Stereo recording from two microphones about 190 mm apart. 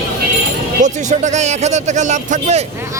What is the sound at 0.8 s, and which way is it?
Speech, 40° right (ahead or behind).